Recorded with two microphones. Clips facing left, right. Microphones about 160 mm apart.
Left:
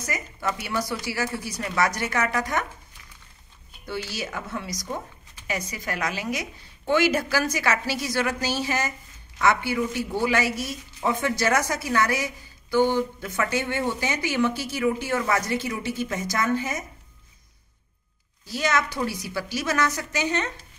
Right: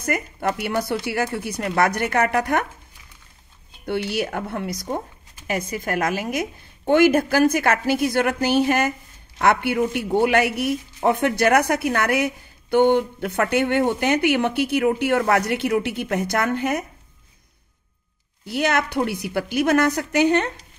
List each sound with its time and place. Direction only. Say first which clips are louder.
0.0 s a woman's voice: right 6 dB; 55° right (ahead or behind)
3.8 s a woman's voice: right 8 dB; 60° right (ahead or behind)
18.4 s a woman's voice: right 4 dB; 60° right (ahead or behind)